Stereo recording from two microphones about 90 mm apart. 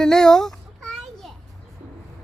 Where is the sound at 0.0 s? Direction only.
10° left (ahead or behind).